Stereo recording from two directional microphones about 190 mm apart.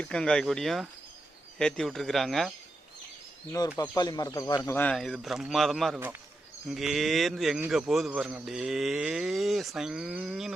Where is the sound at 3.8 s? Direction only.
20° left (ahead or behind).